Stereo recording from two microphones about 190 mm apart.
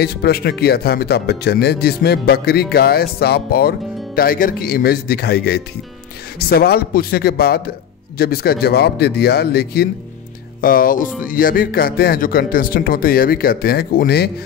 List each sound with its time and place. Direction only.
0.0 s speech: 55° left (ahead or behind)